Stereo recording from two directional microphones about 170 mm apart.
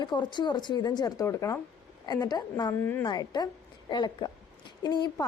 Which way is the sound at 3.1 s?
25° left (ahead or behind).